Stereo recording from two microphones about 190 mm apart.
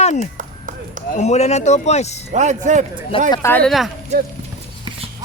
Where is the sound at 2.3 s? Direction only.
40° right (ahead or behind).